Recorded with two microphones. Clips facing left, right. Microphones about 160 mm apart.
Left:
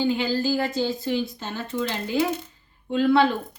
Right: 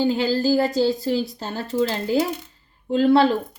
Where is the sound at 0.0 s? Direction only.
40° right (ahead or behind).